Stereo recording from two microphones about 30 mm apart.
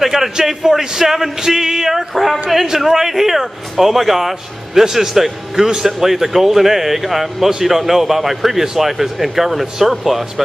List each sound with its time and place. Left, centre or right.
0.0 s speech: centre
2.9 s speech: centre